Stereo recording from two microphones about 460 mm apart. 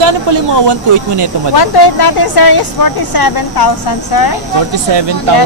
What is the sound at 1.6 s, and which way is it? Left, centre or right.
A woman's voice, left.